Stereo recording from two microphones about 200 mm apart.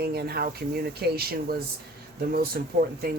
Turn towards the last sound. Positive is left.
turn(degrees=-45)  # may be behind; listen again after turning